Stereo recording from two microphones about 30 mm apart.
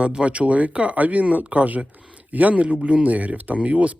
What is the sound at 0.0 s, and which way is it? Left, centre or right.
Speech, right.